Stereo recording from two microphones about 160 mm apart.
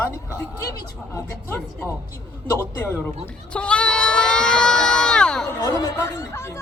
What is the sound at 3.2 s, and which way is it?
Sheep, 5° left (ahead or behind).